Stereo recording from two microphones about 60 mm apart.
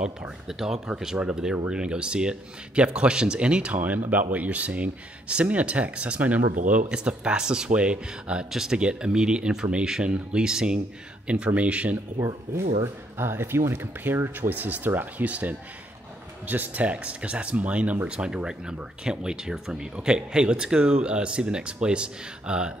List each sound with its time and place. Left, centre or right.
0.0 s speech: centre; by 6.8 s right
6.9 s speech: centre
13.2 s speech: right
14.1 s speech: right
14.5 s speech: right